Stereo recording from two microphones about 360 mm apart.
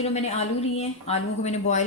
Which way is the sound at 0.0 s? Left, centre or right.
Centre.